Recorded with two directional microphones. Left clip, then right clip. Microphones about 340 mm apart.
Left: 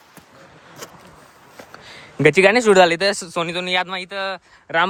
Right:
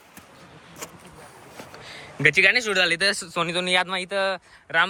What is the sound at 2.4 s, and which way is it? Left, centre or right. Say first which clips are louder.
Speech: left 7 dB; centre.